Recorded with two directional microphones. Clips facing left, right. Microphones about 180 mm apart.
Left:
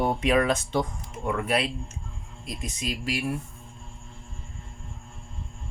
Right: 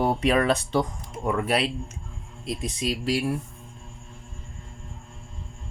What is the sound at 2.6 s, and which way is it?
Speech, 30° right (ahead or behind).